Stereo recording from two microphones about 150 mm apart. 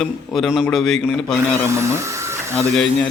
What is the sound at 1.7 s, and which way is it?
Speech, 20° right (ahead or behind).